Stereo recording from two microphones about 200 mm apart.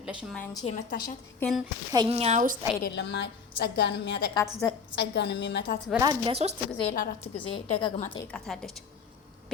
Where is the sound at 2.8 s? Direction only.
60° left (ahead or behind).